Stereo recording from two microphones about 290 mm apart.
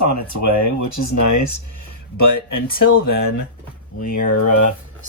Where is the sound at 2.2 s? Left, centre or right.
Left.